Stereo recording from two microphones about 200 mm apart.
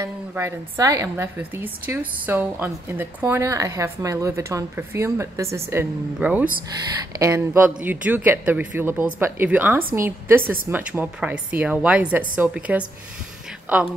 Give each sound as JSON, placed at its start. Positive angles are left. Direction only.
{"t": 0.0, "sound": "a woman's voice", "side_deg": -15}
{"t": 10.4, "sound": "speech", "side_deg": -45}
{"t": 10.7, "sound": "a woman's voice", "side_deg": -10}